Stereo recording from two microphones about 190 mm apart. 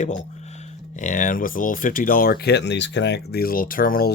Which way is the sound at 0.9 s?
40° left (ahead or behind).